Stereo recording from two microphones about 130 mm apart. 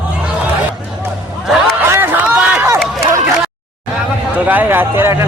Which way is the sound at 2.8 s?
Centre (ahead or behind).